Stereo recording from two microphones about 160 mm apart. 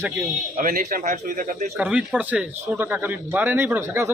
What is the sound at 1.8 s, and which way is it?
Speech, 5° right (ahead or behind).